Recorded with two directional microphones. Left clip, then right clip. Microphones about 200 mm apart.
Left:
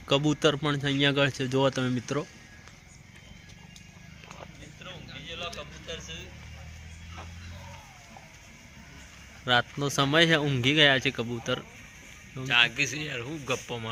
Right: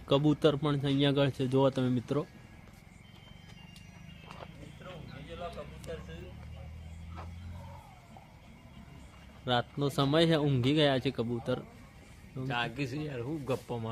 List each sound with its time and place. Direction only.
0.1 s speech: 5° right (ahead or behind)
5.3 s a sound: 45° right (ahead or behind)
9.4 s speech: centre (ahead or behind)
12.5 s a man's voice: 40° right (ahead or behind)
13.2 s speech: 10° right (ahead or behind)